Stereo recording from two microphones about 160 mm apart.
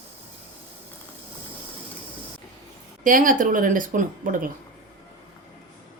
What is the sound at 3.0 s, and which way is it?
Speech, 60° right (ahead or behind).